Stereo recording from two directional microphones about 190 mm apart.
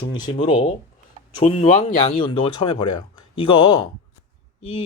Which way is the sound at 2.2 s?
25° left (ahead or behind).